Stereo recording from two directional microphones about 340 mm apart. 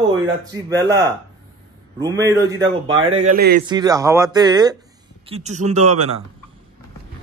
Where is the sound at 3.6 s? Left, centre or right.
Centre.